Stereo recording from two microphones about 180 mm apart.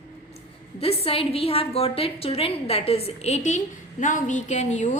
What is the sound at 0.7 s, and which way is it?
A woman's voice, 30° left (ahead or behind).